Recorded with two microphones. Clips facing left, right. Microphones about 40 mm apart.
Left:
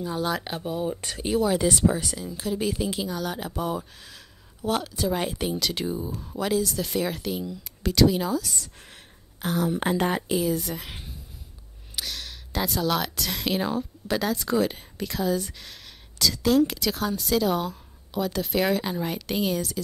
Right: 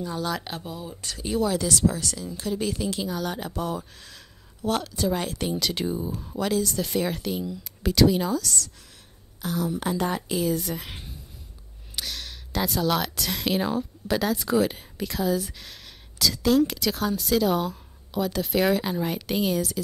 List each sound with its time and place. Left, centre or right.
0.0 s speech: centre
0.7 s speech: left
1.2 s speech: centre
1.6 s speech: left; by 8.4 s centre
8.4 s speech: centre
8.7 s a sound: left
10.3 s speech: centre